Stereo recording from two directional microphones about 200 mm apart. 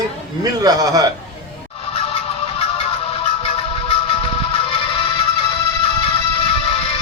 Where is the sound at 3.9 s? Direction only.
25° left (ahead or behind).